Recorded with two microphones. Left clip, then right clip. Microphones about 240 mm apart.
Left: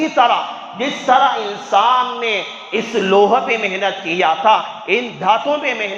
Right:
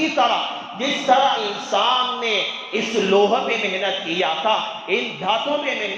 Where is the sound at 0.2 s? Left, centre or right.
Left.